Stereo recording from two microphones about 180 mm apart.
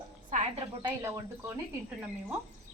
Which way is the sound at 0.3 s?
45° right (ahead or behind).